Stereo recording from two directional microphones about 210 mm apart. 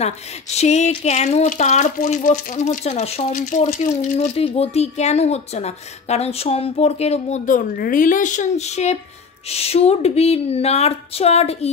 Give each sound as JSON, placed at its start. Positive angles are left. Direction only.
{"t": 0.0, "sound": "a woman's voice", "side_deg": 30}